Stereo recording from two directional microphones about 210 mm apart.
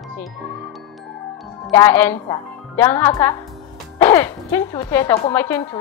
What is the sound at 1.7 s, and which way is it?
A woman's voice, 10° left (ahead or behind).